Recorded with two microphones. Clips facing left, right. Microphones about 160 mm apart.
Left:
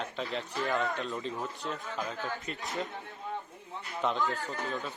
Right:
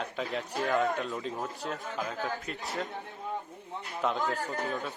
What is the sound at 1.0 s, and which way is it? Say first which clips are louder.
Speech: right 1 dB; 5° right (ahead or behind).